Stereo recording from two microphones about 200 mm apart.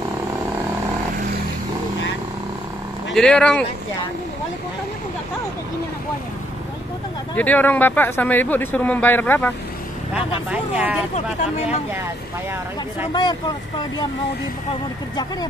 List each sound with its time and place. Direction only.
3.1 s speech: 5° left (ahead or behind)
7.3 s speech: 10° left (ahead or behind)
10.1 s speech: 5° right (ahead or behind)
13.1 s speech: 20° left (ahead or behind)